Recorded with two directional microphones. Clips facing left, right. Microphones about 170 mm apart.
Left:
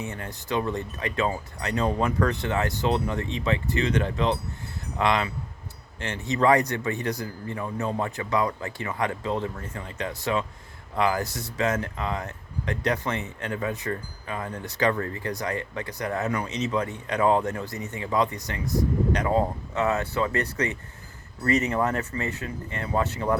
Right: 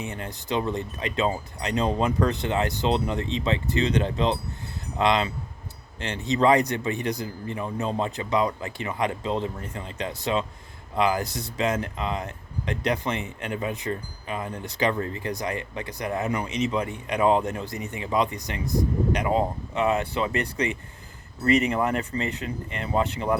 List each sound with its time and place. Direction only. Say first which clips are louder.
0.0 s a man's voice: right 1 dB; 15° right (ahead or behind)